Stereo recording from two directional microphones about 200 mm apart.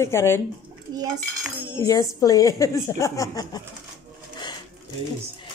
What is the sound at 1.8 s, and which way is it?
A woman's voice, 15° left (ahead or behind).